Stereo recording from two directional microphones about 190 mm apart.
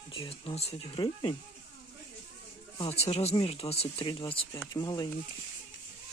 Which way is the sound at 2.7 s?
30° left (ahead or behind).